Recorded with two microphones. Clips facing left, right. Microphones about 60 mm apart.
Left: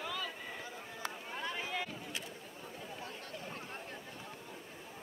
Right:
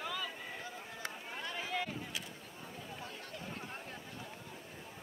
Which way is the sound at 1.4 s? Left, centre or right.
Centre.